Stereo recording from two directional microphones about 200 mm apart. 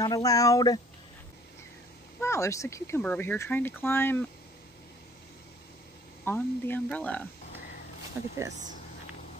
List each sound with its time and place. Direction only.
0.0 s speech: 15° left (ahead or behind)
2.2 s speech: 15° left (ahead or behind)
6.2 s speech: 10° left (ahead or behind)